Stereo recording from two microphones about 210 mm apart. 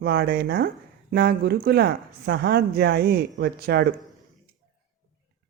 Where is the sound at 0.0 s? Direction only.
50° right (ahead or behind).